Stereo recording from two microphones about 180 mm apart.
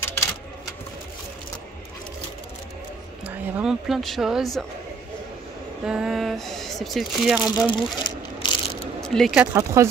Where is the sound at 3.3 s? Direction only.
5° right (ahead or behind).